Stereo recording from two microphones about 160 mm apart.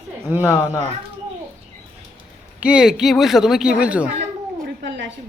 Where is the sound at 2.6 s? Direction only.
5° right (ahead or behind).